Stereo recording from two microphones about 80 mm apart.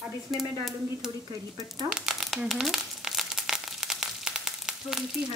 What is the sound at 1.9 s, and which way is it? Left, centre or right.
Crumpling, centre.